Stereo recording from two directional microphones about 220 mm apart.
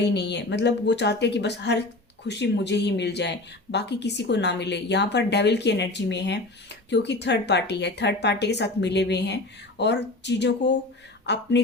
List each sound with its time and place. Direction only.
0.0 s speech: 50° left (ahead or behind)